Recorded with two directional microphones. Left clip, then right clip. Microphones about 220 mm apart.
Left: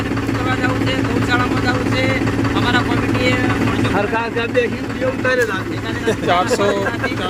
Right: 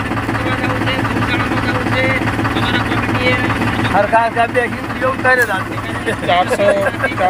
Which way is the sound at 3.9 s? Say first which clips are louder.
Right 6 dB; 15° left (ahead or behind).